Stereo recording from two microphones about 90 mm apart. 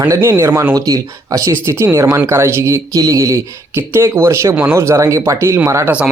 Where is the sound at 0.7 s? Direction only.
40° right (ahead or behind).